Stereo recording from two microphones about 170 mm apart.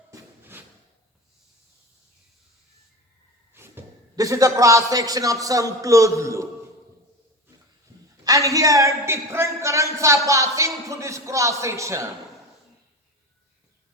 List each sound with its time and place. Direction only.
0.1 s drawer open or close: 15° right (ahead or behind)
3.5 s a man's voice: 15° right (ahead or behind)
8.2 s a woman's voice: 20° right (ahead or behind)